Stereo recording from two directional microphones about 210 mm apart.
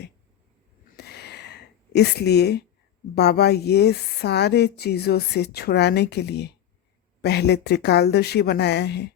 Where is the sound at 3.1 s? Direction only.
50° left (ahead or behind).